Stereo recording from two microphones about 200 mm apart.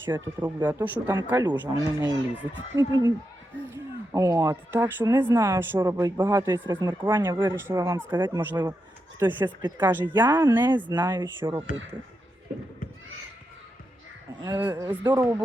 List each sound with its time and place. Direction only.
0.0 s speech: 10° right (ahead or behind)
2.7 s speech: 20° right (ahead or behind)
14.4 s speech: 10° right (ahead or behind)